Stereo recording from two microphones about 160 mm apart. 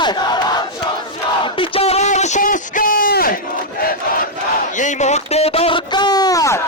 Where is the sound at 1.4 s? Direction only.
30° left (ahead or behind); by 3.4 s 65° left (ahead or behind).